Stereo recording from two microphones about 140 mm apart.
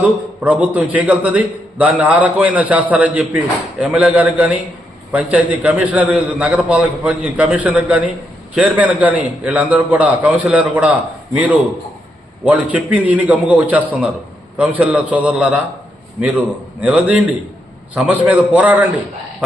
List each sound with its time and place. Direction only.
0.0 s a man's voice: 10° right (ahead or behind)
16.8 s a man's voice: 10° right (ahead or behind)